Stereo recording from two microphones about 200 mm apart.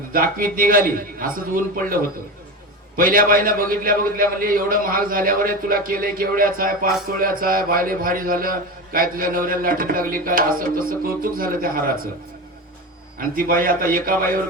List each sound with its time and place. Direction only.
0.1 s a man's voice: 45° right (ahead or behind)
13.1 s a man's voice: 45° right (ahead or behind)